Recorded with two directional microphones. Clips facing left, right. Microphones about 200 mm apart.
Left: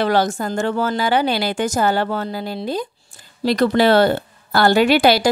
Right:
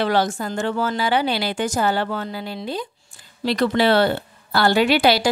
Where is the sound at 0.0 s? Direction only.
45° left (ahead or behind).